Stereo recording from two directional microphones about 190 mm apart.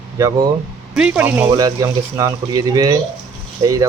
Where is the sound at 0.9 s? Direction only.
5° right (ahead or behind).